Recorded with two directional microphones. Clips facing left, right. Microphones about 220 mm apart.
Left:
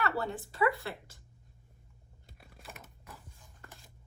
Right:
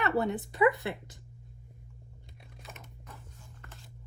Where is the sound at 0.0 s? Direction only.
20° right (ahead or behind).